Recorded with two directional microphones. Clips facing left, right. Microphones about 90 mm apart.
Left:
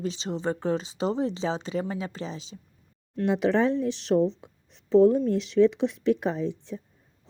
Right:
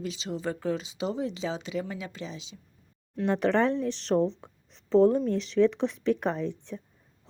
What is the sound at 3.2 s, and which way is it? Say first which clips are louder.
Speech: left 1 dB; 10° left (ahead or behind).